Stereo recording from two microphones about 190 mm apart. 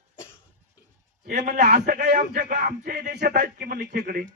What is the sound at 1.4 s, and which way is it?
A man's voice, 50° right (ahead or behind).